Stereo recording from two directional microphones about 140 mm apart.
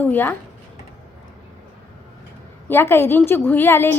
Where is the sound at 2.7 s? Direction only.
15° left (ahead or behind).